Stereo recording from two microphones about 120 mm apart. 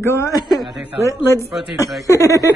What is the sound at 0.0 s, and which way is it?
Speech, 25° left (ahead or behind).